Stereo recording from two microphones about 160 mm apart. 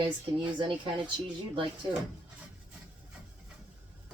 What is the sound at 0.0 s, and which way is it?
Speech, 30° right (ahead or behind).